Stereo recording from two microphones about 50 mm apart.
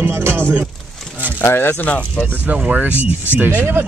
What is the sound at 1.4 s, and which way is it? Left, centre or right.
Speech, left.